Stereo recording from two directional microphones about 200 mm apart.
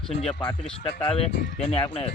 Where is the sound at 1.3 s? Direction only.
50° left (ahead or behind).